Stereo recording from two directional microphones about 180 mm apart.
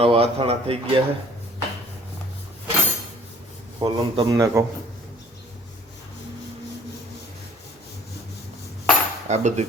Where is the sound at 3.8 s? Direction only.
20° right (ahead or behind).